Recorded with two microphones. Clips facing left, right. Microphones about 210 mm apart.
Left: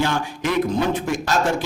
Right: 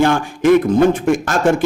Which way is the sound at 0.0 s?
50° right (ahead or behind).